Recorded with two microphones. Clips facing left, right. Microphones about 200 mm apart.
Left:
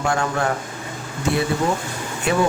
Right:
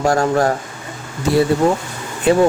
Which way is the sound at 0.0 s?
40° right (ahead or behind).